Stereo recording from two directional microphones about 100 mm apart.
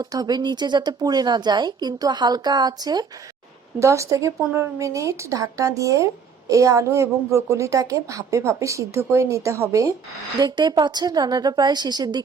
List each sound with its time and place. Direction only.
0.0 s speech: 40° right (ahead or behind)
3.8 s a woman's voice: 30° right (ahead or behind)
10.3 s speech: 50° right (ahead or behind)